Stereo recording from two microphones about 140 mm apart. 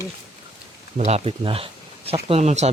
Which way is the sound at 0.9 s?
50° right (ahead or behind).